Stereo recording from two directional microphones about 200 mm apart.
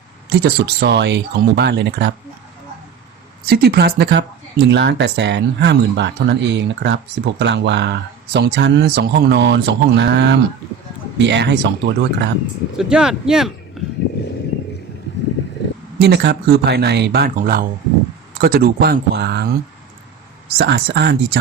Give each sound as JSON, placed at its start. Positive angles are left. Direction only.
{"t": 0.3, "sound": "speech", "side_deg": -55}
{"t": 3.4, "sound": "speech", "side_deg": -50}
{"t": 12.7, "sound": "speech", "side_deg": -5}
{"t": 13.8, "sound": "a sound", "side_deg": 0}
{"t": 16.0, "sound": "speech", "side_deg": -55}
{"t": 20.6, "sound": "speech", "side_deg": -55}